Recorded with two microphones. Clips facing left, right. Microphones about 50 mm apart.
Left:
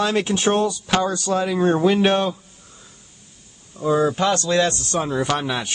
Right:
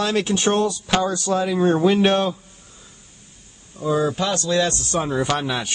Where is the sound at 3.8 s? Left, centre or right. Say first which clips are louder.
Left 2 dB; left.